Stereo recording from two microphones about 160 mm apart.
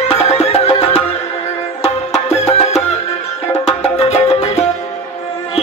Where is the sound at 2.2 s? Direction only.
40° left (ahead or behind).